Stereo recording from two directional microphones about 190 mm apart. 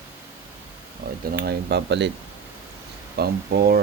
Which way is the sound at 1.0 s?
50° right (ahead or behind).